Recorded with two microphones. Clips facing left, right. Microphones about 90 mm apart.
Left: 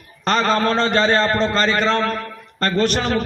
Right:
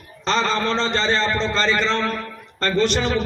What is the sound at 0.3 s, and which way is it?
A man's voice, 55° left (ahead or behind).